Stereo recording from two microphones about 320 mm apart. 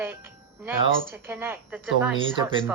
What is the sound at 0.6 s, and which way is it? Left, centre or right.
Speech, centre.